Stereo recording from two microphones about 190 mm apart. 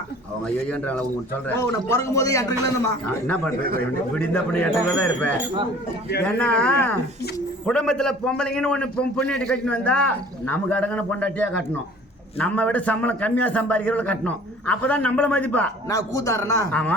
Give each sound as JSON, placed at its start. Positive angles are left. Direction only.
{"t": 0.4, "sound": "a man's voice", "side_deg": 10}
{"t": 15.9, "sound": "a man's voice", "side_deg": 20}